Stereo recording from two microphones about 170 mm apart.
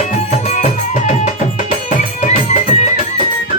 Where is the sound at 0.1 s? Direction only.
40° left (ahead or behind).